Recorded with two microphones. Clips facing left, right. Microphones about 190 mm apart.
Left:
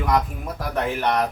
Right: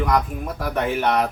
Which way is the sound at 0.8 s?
5° right (ahead or behind).